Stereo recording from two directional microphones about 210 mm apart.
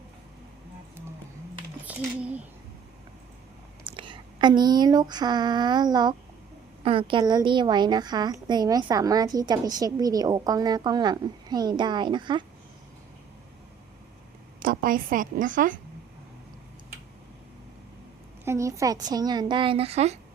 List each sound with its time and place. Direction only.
1.9 s a sound: 5° right (ahead or behind)
3.8 s a woman's voice: 25° right (ahead or behind)
14.6 s a woman's voice: 40° right (ahead or behind)
18.4 s a woman's voice: 15° right (ahead or behind); by 20.1 s 30° right (ahead or behind)